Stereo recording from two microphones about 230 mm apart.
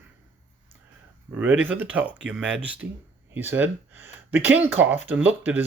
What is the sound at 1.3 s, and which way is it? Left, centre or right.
Speech, centre.